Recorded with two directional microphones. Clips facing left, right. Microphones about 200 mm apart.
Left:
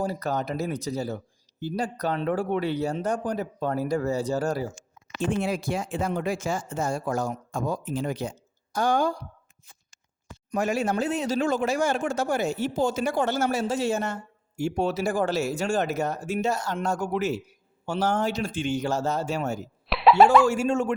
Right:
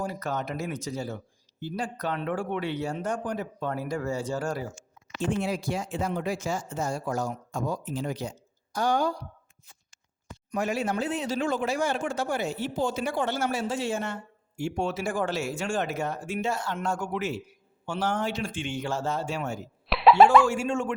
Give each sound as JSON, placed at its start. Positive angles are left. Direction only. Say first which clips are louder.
{"t": 0.0, "sound": "speech", "louder": "left 3 dB", "side_deg": 35}
{"t": 5.4, "sound": "speech", "louder": "left 2 dB", "side_deg": 55}
{"t": 10.5, "sound": "speech", "louder": "left 3 dB", "side_deg": 45}
{"t": 19.9, "sound": "a sound", "louder": "even", "side_deg": 0}
{"t": 20.5, "sound": "speech", "louder": "left 4 dB", "side_deg": 40}